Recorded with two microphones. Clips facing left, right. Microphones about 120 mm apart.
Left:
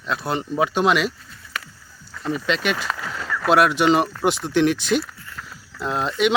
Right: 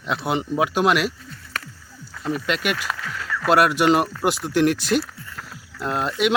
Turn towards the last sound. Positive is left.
turn(degrees=-5)  # may be behind; listen again after turning